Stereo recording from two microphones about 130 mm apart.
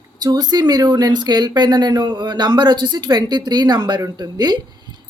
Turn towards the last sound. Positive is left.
turn(degrees=-30)  # may be behind; listen again after turning